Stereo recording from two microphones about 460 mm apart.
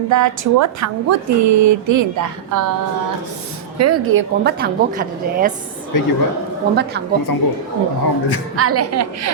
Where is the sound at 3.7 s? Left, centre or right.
Right.